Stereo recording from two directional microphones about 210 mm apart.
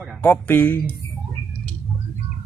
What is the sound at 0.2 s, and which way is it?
Livestock, 10° left (ahead or behind).